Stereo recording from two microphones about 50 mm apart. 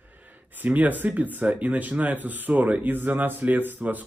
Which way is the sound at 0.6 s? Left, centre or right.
Right.